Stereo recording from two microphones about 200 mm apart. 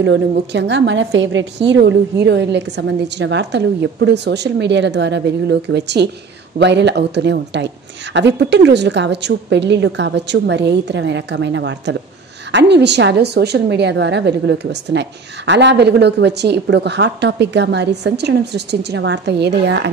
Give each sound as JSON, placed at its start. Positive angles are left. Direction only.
{"t": 0.0, "sound": "a woman's voice", "side_deg": -60}